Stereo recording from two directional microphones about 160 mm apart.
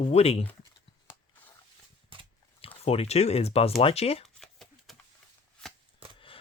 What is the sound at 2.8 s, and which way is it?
Speech, 40° left (ahead or behind).